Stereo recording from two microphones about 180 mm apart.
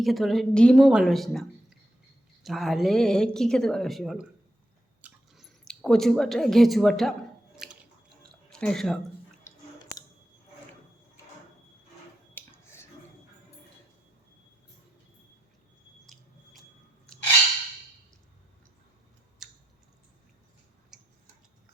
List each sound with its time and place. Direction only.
0.0 s a woman's voice: centre (ahead or behind)
5.0 s chewing: centre (ahead or behind)
7.5 s squish: 5° right (ahead or behind)
8.4 s speech: 5° left (ahead or behind)
12.3 s a sound: 10° left (ahead or behind)
19.4 s a sound: centre (ahead or behind)
20.9 s tick-tock: 5° right (ahead or behind)